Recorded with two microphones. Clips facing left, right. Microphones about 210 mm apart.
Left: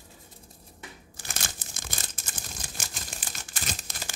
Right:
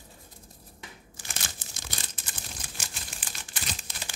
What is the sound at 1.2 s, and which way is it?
Crumpling, 45° left (ahead or behind).